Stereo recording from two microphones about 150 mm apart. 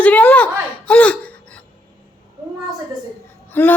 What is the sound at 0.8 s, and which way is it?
Gasp, 10° left (ahead or behind).